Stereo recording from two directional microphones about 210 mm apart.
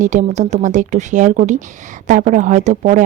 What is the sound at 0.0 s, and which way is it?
A woman's voice, 35° right (ahead or behind).